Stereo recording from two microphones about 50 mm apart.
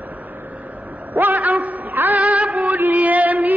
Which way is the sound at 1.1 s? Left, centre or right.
Right.